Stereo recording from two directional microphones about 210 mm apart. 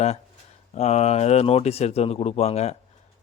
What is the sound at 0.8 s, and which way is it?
Speech, 30° left (ahead or behind).